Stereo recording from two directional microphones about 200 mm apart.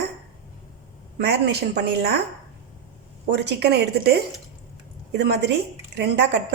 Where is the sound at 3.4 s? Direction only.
55° right (ahead or behind).